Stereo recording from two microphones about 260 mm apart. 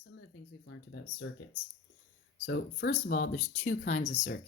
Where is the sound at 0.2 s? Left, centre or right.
Left.